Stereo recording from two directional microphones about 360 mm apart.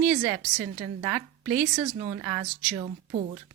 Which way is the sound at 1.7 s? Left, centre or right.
Centre.